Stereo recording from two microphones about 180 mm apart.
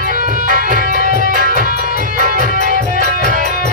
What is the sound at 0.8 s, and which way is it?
Music, 55° left (ahead or behind).